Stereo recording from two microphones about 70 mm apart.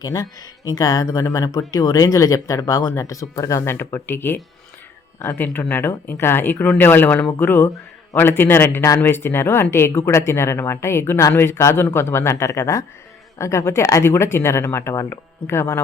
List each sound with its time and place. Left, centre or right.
0.0 s speech: left
3.6 s speech: left
5.4 s speech: left